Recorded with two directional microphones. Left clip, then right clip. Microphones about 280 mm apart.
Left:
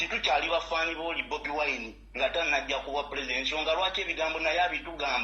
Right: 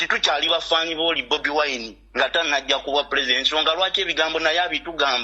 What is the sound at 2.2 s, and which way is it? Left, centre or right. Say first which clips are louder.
A man's voice: right 7 dB; right.